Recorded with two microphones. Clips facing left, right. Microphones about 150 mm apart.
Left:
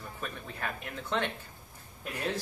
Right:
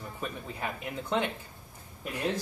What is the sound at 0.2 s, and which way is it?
Speech, 10° right (ahead or behind).